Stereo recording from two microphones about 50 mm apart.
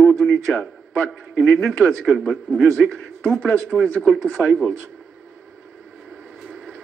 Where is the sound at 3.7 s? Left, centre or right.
Centre.